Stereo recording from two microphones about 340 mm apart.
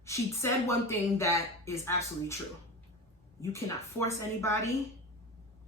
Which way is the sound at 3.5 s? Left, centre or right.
Centre.